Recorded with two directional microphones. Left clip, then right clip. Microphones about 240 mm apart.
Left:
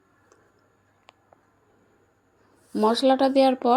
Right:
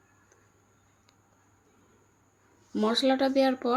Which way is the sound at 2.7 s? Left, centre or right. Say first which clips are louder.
Left 6 dB; centre.